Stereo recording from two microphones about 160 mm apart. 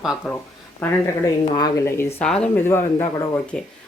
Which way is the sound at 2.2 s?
5° left (ahead or behind).